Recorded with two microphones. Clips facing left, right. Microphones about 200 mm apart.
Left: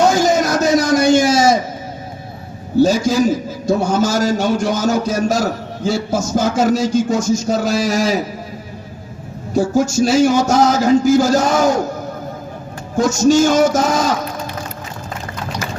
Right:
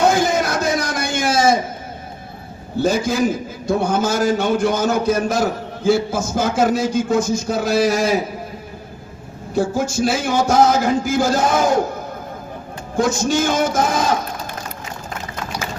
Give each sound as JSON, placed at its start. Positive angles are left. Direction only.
{"t": 0.0, "sound": "a sound", "side_deg": -55}
{"t": 2.8, "sound": "a man's voice", "side_deg": -55}
{"t": 9.6, "sound": "a man's voice", "side_deg": -55}
{"t": 13.0, "sound": "a man's voice", "side_deg": -55}